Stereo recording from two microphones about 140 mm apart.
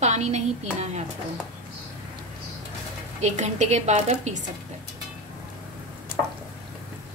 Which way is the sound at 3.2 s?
55° right (ahead or behind).